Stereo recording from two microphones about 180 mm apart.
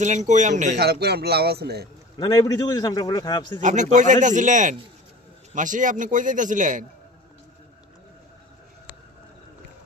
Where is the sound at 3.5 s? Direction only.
40° right (ahead or behind).